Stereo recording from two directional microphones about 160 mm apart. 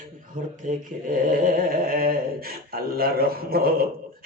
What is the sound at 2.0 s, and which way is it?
A man's voice, 70° right (ahead or behind).